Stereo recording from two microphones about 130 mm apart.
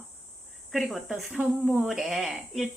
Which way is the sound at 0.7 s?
Centre (ahead or behind).